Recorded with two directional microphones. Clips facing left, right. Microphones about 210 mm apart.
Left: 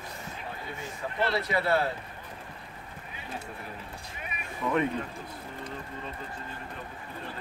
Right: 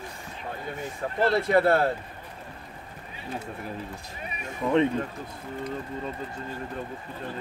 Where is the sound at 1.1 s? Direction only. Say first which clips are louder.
Right 7 dB; 50° right (ahead or behind).